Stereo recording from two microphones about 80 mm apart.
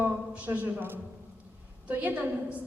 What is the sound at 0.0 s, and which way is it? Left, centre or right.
A man's voice, right.